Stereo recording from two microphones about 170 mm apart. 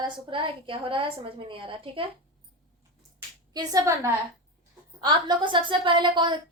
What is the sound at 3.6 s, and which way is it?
A woman's voice, 20° right (ahead or behind).